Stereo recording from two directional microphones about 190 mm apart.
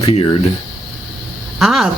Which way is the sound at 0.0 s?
35° left (ahead or behind).